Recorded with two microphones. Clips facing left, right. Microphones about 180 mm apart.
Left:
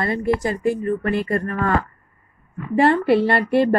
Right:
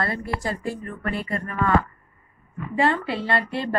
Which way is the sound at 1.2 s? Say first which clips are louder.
Left 4 dB; 45° left (ahead or behind).